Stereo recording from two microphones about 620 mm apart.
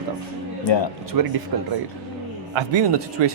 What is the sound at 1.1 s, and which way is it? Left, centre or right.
Speech, right.